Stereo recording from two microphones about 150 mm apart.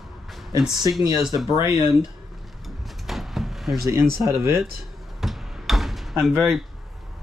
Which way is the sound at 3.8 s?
20° right (ahead or behind).